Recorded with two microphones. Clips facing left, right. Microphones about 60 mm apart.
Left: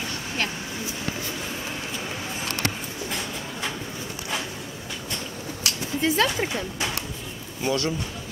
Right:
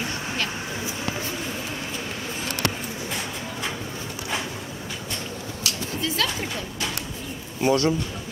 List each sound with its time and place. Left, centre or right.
2.4 s a sound: left
5.9 s speech: left
7.6 s a man's voice: right